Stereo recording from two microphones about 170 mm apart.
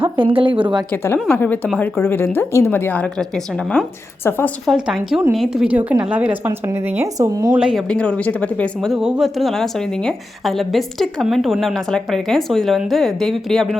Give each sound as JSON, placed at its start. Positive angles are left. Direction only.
{"t": 0.0, "sound": "speech", "side_deg": -30}
{"t": 0.9, "sound": "a woman's voice", "side_deg": 10}
{"t": 4.6, "sound": "a woman's voice", "side_deg": 0}
{"t": 7.5, "sound": "speech", "side_deg": -5}